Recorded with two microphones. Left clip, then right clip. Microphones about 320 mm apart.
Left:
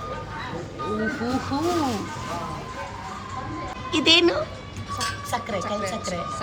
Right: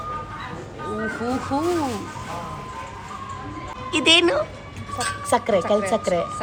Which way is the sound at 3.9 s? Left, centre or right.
Centre.